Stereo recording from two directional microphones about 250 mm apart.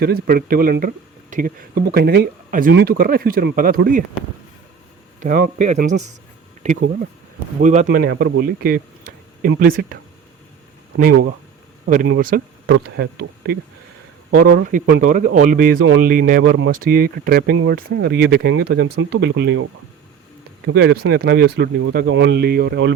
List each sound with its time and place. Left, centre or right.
0.0 s speech: right
5.2 s speech: right
7.9 s speech: right
11.9 s speech: right
14.3 s speech: right
20.7 s speech: right